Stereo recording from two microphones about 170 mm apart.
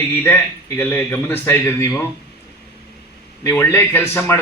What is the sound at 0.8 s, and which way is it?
A man's voice, 15° left (ahead or behind).